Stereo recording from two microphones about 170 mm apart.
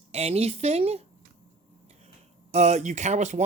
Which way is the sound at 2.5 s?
40° right (ahead or behind).